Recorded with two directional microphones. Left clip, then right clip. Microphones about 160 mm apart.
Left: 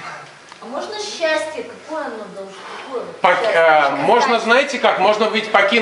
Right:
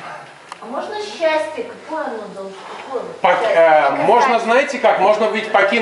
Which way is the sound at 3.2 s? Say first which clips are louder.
Right 1 dB; 25° left (ahead or behind).